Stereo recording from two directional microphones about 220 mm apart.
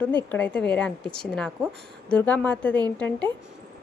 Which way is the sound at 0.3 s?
5° left (ahead or behind).